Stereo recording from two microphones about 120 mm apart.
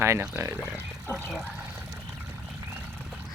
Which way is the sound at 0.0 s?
20° right (ahead or behind).